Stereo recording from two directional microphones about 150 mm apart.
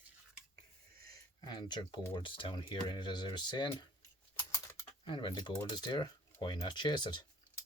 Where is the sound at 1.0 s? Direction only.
25° left (ahead or behind).